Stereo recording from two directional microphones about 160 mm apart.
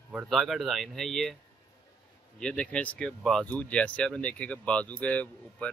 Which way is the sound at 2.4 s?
5° left (ahead or behind).